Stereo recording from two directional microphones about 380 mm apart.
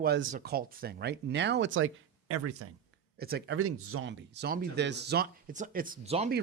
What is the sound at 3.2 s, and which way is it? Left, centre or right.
Speech, right.